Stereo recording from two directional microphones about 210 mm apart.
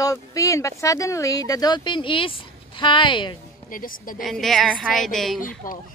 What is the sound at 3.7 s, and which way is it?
Speech, 40° left (ahead or behind).